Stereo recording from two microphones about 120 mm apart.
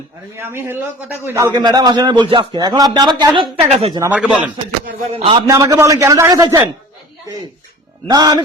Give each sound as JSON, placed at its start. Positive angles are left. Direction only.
{"t": 0.3, "sound": "a man's voice", "side_deg": -20}
{"t": 1.5, "sound": "a man's voice", "side_deg": -35}
{"t": 3.7, "sound": "speech", "side_deg": -55}
{"t": 4.1, "sound": "speech", "side_deg": -10}
{"t": 5.1, "sound": "a man's voice", "side_deg": -50}
{"t": 5.5, "sound": "a man's voice", "side_deg": -30}
{"t": 8.0, "sound": "a man's voice", "side_deg": -35}